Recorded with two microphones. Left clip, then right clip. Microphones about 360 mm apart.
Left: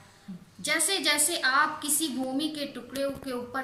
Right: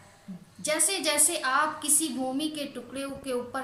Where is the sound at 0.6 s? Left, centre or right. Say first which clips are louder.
Left 1 dB; centre.